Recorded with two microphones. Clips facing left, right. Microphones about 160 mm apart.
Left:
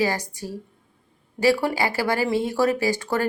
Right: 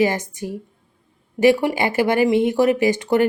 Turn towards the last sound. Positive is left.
turn(degrees=-20)  # may be behind; listen again after turning